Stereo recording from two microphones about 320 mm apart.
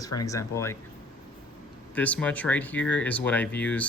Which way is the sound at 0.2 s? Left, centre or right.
Centre.